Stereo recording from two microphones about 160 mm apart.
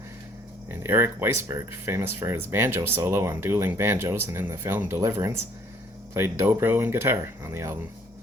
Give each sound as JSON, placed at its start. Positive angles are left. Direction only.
{"t": 0.7, "sound": "speech", "side_deg": -15}